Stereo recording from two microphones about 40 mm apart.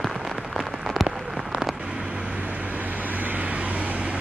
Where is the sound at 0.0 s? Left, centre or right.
Centre.